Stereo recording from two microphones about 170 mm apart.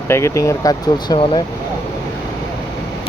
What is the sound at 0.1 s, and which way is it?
Speech, 15° left (ahead or behind).